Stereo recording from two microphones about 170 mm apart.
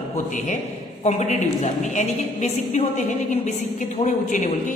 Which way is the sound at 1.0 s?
40° left (ahead or behind).